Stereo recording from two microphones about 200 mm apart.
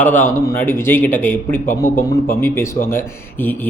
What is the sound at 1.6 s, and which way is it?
Speech, 45° left (ahead or behind).